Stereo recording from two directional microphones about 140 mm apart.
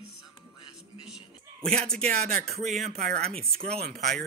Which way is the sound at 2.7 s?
Centre (ahead or behind).